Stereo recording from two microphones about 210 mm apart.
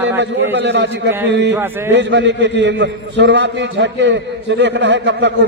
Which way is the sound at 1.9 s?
55° right (ahead or behind).